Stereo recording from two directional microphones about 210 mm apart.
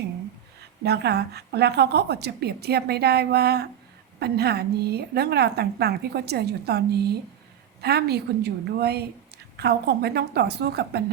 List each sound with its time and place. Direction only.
0.9 s a woman's voice: 50° right (ahead or behind)